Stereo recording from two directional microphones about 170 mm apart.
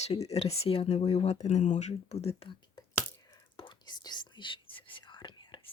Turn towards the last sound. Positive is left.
turn(degrees=25)  # may be behind; listen again after turning